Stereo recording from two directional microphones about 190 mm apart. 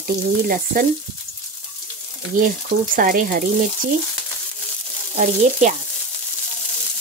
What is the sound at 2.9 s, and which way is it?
Frying, 50° right (ahead or behind).